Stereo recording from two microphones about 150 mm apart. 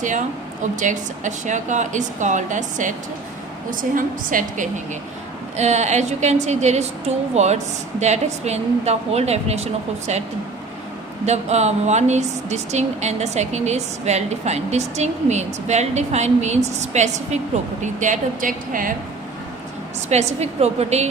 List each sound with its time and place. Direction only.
0.0 s a woman's voice: 55° right (ahead or behind)
5.5 s speech: 50° right (ahead or behind)
11.3 s speech: 45° right (ahead or behind)
18.0 s a woman's voice: 60° right (ahead or behind)
20.1 s speech: 45° right (ahead or behind)